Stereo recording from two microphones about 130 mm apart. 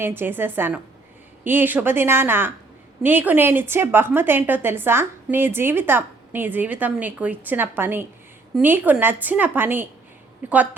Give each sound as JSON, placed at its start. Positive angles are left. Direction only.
{"t": 0.0, "sound": "a woman's voice", "side_deg": -15}